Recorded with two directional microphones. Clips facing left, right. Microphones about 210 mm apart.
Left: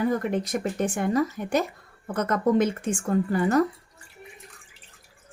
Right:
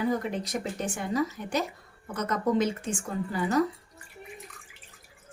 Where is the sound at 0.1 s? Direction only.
55° left (ahead or behind).